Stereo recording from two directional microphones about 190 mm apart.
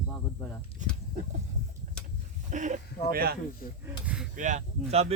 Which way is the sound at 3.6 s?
50° left (ahead or behind).